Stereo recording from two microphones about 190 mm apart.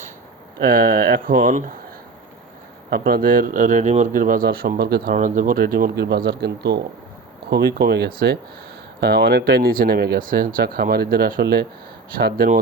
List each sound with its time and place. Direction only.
0.6 s speech: 50° right (ahead or behind)
2.9 s speech: 50° right (ahead or behind)